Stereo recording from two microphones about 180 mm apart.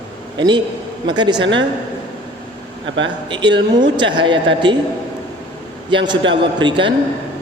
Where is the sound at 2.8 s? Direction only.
90° right.